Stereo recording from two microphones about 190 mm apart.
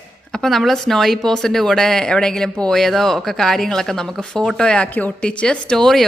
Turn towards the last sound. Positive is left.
turn(degrees=0)  # may be behind; listen again after turning